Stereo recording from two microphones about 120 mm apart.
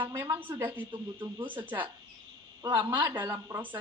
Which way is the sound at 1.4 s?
45° right (ahead or behind).